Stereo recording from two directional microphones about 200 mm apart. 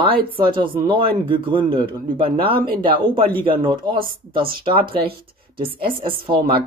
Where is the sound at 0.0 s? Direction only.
25° right (ahead or behind).